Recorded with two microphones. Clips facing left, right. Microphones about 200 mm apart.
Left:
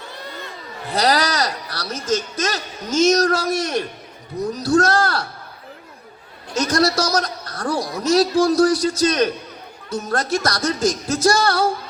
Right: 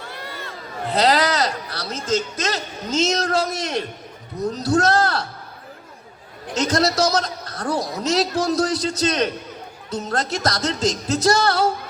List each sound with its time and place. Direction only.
0.9 s speech: 25° right (ahead or behind)
6.5 s a man's voice: 25° right (ahead or behind)